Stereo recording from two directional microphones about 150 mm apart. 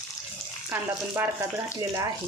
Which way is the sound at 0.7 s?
15° right (ahead or behind).